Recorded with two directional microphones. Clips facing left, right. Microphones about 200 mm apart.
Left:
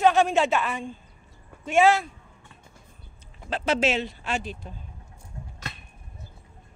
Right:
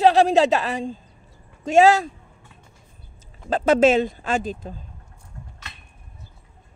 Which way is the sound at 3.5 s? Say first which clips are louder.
Right 8 dB; 50° right (ahead or behind).